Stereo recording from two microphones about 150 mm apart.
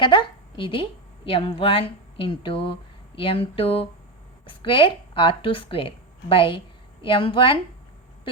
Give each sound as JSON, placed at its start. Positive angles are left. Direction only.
{"t": 0.0, "sound": "a woman's voice", "side_deg": 35}